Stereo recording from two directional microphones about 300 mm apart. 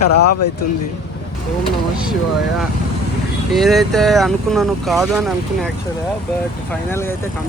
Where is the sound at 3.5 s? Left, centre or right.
Centre.